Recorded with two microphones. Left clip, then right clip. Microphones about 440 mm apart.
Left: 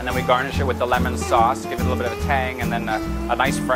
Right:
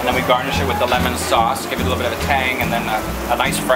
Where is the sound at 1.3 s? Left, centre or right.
Left.